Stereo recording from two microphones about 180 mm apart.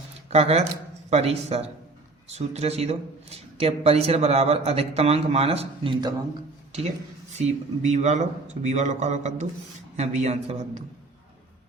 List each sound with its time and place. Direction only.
0.3 s speech: 35° right (ahead or behind)
7.3 s speech: 40° right (ahead or behind)